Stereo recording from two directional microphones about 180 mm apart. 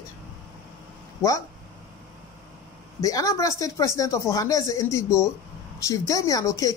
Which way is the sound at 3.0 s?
20° left (ahead or behind).